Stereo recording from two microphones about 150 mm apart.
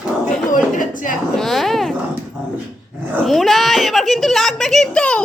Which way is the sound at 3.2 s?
Centre (ahead or behind).